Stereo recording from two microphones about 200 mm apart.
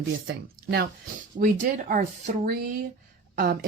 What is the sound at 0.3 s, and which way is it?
Speech, 50° right (ahead or behind).